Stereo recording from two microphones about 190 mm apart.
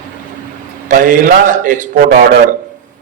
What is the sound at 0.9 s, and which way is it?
A man's voice, 45° right (ahead or behind).